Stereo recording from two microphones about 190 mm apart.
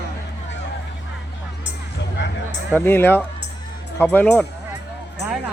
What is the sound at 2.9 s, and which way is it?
Speech, 10° left (ahead or behind).